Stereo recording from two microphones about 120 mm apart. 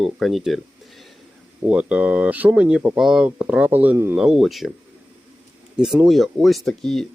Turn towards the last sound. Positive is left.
turn(degrees=5)  # may be behind; listen again after turning